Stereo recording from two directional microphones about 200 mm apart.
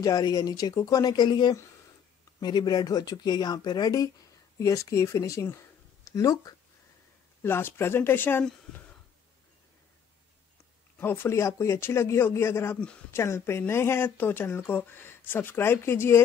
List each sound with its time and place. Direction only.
0.0 s a man's voice: 15° left (ahead or behind)
11.0 s a man's voice: 10° left (ahead or behind)